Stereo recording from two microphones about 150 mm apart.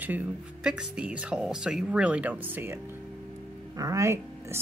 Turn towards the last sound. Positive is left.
turn(degrees=-20)  # may be behind; listen again after turning